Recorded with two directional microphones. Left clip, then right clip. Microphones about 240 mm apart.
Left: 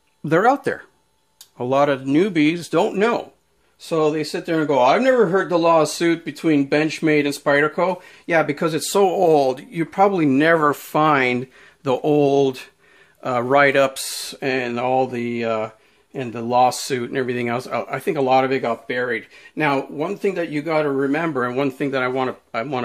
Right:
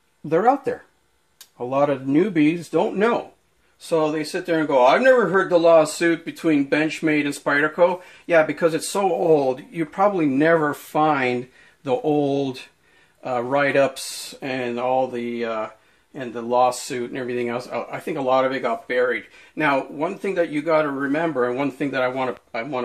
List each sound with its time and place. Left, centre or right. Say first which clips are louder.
0.3 s speech: left 2 dB; left